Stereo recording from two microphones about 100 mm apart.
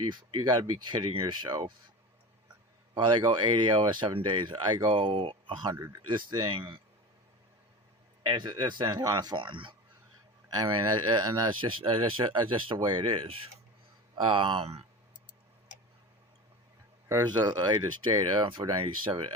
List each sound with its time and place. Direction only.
0.4 s speech: 50° right (ahead or behind)
2.9 s speech: 55° right (ahead or behind)
8.2 s speech: 50° right (ahead or behind)
10.5 s speech: 40° right (ahead or behind); by 14.7 s 55° right (ahead or behind)
17.2 s speech: 45° right (ahead or behind)